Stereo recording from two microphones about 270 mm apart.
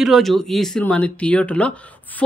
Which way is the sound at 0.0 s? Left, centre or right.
Centre.